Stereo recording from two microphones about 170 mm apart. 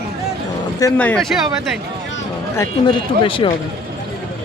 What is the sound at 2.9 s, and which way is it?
Speech, 30° left (ahead or behind).